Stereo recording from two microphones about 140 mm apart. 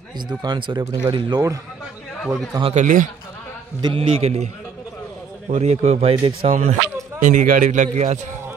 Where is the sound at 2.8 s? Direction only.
70° right (ahead or behind).